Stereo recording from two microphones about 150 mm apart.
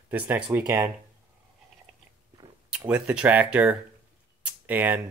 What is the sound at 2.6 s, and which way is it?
Speech, 5° right (ahead or behind).